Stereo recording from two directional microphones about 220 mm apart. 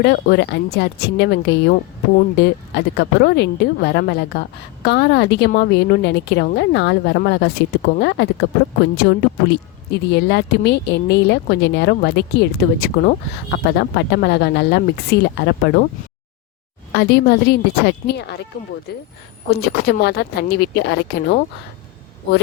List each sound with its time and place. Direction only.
0.0 s speech: 50° left (ahead or behind)
16.9 s speech: 50° left (ahead or behind)